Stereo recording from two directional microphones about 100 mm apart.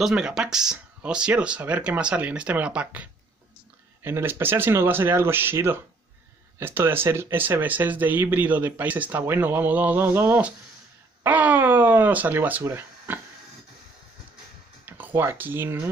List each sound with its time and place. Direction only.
0.0 s speech: 5° right (ahead or behind); by 13.2 s 20° right (ahead or behind)
14.9 s speech: 20° right (ahead or behind)